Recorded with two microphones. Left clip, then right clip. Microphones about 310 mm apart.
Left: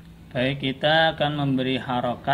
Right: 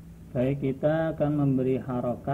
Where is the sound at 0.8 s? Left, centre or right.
Centre.